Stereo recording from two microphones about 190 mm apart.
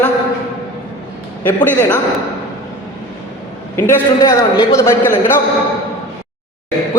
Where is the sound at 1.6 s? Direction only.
10° left (ahead or behind).